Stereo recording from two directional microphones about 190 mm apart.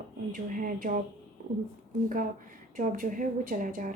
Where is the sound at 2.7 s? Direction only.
45° right (ahead or behind).